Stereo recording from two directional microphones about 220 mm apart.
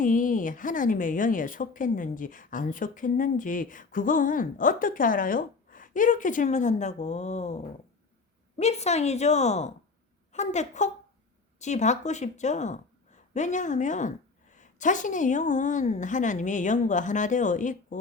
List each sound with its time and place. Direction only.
0.0 s a woman's voice: 35° left (ahead or behind)